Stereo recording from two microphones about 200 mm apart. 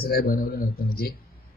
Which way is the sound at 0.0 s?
50° left (ahead or behind).